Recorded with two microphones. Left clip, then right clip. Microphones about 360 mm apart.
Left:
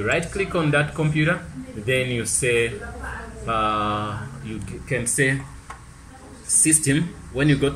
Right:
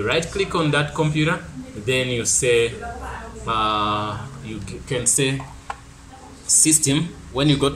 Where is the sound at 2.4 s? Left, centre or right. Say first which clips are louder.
Right 3 dB; right.